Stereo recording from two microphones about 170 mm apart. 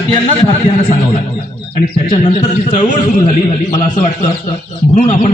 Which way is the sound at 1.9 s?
45° left (ahead or behind).